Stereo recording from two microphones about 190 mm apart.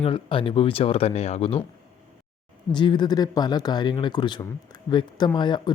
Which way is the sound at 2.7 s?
25° left (ahead or behind).